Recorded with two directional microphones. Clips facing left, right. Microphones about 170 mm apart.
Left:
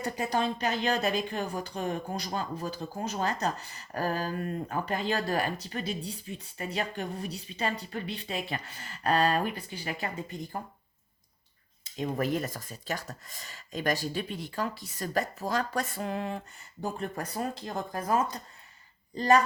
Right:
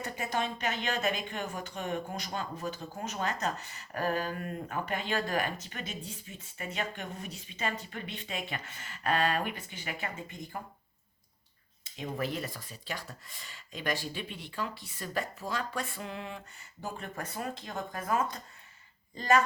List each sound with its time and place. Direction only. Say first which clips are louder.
0.0 s speech: left 4 dB; 35° left (ahead or behind)
11.9 s speech: left 5 dB; 45° left (ahead or behind)